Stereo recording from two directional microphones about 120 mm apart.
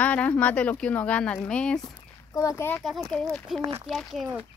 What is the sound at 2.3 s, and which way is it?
Speech, 25° left (ahead or behind).